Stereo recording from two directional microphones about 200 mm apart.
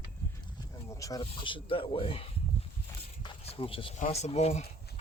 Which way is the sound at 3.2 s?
30° left (ahead or behind).